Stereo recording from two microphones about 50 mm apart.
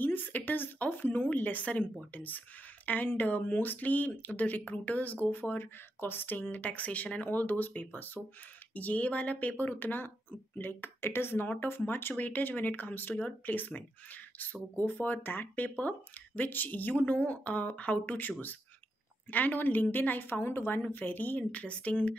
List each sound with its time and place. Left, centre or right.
0.0 s speech: left
19.3 s speech: left
20.9 s speech: left